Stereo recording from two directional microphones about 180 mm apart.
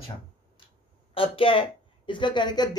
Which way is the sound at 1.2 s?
30° left (ahead or behind).